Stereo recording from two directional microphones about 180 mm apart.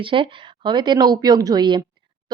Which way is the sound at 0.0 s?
30° right (ahead or behind).